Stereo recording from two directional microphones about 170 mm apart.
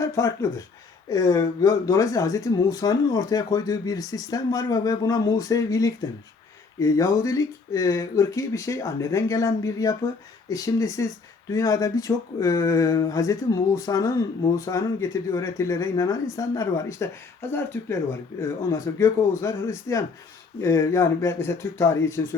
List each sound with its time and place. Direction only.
0.0 s speech: 15° left (ahead or behind)